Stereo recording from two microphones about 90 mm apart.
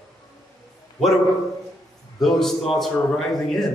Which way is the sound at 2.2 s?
5° left (ahead or behind).